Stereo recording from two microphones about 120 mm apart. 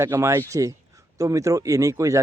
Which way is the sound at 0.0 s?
20° right (ahead or behind).